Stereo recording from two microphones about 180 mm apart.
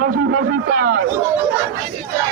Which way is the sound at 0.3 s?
55° right (ahead or behind).